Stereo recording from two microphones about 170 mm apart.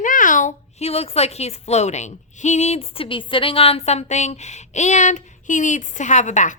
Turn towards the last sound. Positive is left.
turn(degrees=45)  # may be behind; listen again after turning